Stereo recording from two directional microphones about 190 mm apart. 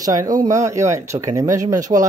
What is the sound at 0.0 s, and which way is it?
Speech, 20° right (ahead or behind).